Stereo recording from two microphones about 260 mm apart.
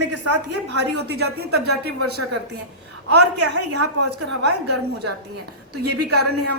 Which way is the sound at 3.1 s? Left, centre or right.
Right.